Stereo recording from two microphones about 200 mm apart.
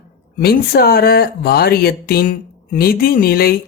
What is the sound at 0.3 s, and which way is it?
Speech, 50° left (ahead or behind).